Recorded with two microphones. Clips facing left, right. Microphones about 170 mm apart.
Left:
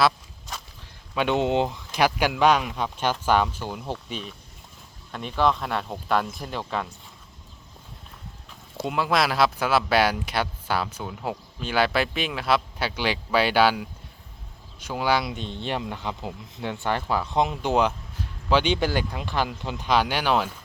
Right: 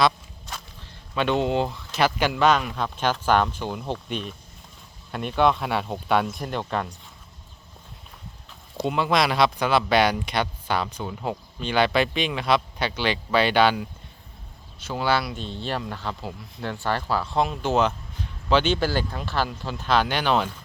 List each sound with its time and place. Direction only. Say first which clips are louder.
0.0 s walk: right 1 dB; centre (ahead or behind)
1.1 s speech: even; 15° left (ahead or behind)
8.8 s speech: right 1 dB; centre (ahead or behind)